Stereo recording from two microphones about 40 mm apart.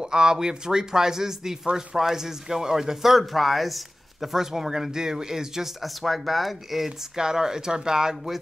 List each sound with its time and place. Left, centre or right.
0.0 s speech: centre
5.8 s speech: centre
7.2 s speech: centre